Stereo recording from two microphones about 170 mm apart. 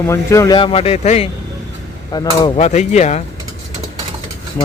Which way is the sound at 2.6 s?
40° left (ahead or behind).